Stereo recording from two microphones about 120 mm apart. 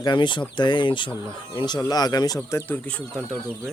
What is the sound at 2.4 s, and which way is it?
Speech, 20° left (ahead or behind).